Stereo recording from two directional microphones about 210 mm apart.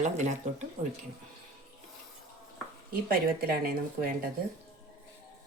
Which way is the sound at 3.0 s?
45° right (ahead or behind).